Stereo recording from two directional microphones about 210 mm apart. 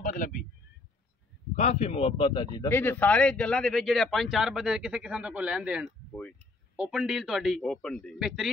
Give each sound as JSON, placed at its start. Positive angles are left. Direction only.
{"t": 0.0, "sound": "a sound", "side_deg": 40}
{"t": 1.5, "sound": "speech", "side_deg": 30}
{"t": 2.7, "sound": "speech", "side_deg": 10}